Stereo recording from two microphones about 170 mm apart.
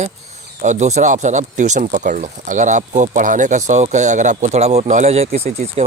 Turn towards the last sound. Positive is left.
turn(degrees=-40)  # may be behind; listen again after turning